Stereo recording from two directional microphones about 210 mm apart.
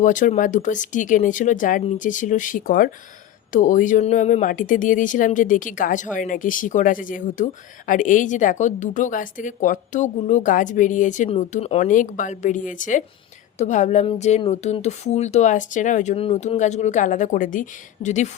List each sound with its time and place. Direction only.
0.0 s speech: 35° left (ahead or behind)